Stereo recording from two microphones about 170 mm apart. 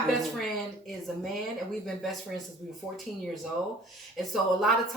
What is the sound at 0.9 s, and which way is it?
Speech, centre (ahead or behind).